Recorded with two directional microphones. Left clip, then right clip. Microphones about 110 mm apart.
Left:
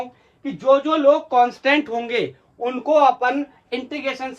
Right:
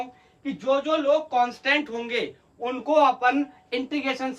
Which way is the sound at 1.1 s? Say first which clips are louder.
Left 8 dB; 65° left (ahead or behind).